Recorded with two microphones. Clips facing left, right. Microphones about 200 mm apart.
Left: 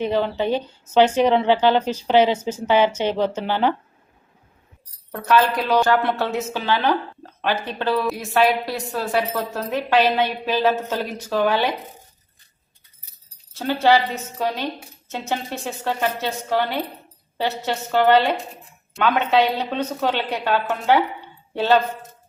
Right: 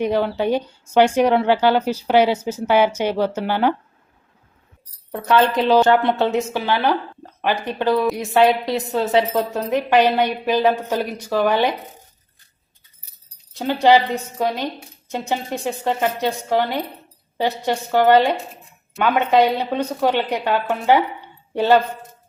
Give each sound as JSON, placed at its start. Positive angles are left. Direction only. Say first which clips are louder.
{"t": 0.0, "sound": "speech", "louder": "right 2 dB", "side_deg": -10}
{"t": 5.1, "sound": "a woman's voice", "louder": "right 2 dB", "side_deg": -20}
{"t": 13.5, "sound": "speech", "louder": "right 3 dB", "side_deg": -15}